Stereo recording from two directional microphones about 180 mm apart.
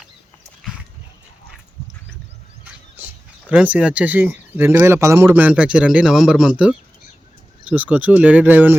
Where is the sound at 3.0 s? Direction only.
10° right (ahead or behind).